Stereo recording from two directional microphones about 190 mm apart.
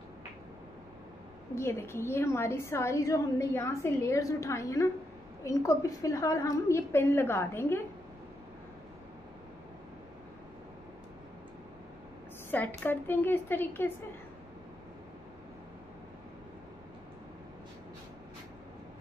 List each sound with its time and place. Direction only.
1.5 s a woman's voice: 10° left (ahead or behind)
12.4 s a woman's voice: 10° left (ahead or behind)